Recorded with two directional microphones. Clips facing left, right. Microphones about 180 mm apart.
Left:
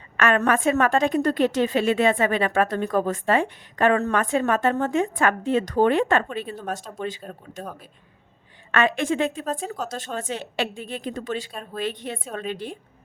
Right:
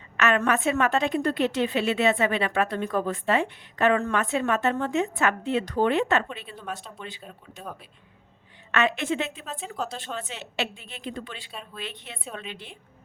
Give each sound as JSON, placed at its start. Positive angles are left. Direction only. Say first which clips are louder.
{"t": 0.2, "sound": "a woman's voice", "louder": "left 3 dB", "side_deg": 45}
{"t": 8.7, "sound": "a woman's voice", "louder": "left 3 dB", "side_deg": 45}